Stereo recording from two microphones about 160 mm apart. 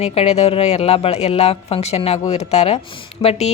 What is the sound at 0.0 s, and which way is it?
Speech, 40° left (ahead or behind).